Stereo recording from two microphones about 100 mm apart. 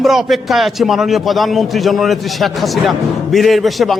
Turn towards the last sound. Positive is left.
turn(degrees=0)  # may be behind; listen again after turning